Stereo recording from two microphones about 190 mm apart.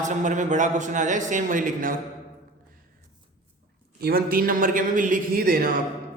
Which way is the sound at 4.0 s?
55° right (ahead or behind).